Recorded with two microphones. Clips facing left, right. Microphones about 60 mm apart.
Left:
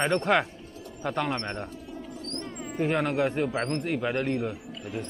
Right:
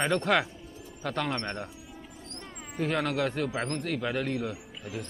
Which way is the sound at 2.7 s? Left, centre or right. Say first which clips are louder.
Left 3 dB; centre.